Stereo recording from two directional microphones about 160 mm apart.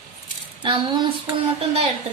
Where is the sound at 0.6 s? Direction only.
30° right (ahead or behind).